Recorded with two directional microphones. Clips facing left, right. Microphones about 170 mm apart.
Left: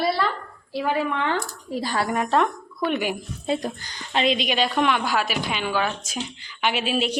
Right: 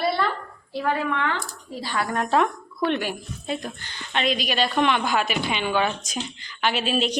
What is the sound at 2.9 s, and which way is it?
Speech, 15° left (ahead or behind).